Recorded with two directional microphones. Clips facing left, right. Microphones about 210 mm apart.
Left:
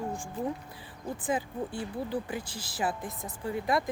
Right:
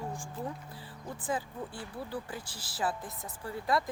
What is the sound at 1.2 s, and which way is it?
Speech, 20° left (ahead or behind).